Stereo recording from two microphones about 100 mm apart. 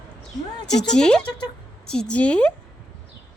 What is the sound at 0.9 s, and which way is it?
A woman's voice, 5° left (ahead or behind).